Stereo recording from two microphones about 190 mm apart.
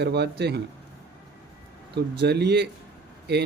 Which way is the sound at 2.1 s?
60° right (ahead or behind).